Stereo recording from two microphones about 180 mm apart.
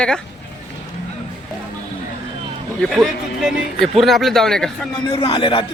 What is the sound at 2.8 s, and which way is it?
Speech, centre (ahead or behind).